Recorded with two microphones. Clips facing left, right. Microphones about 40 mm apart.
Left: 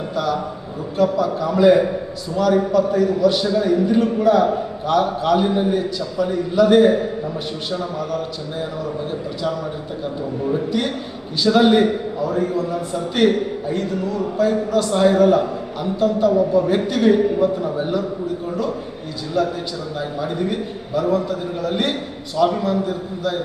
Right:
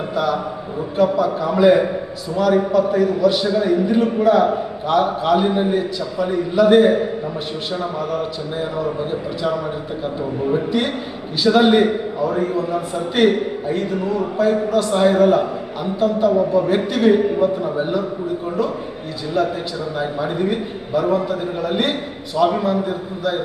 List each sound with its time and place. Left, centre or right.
0.1 s a man's voice: centre
19.4 s a man's voice: right